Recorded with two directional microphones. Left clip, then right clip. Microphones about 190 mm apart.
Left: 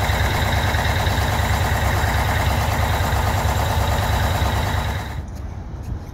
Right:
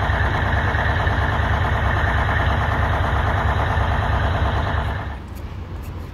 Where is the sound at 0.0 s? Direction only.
55° left (ahead or behind).